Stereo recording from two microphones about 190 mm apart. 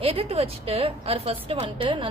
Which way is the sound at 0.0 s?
30° right (ahead or behind).